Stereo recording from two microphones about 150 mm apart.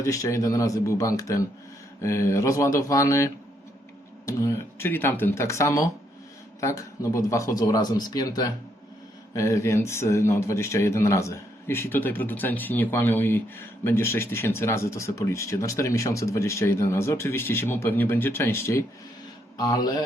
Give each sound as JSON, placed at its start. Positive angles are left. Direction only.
{"t": 0.0, "sound": "a man's voice", "side_deg": 20}